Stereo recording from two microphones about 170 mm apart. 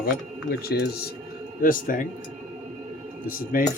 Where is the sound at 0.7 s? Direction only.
65° left (ahead or behind).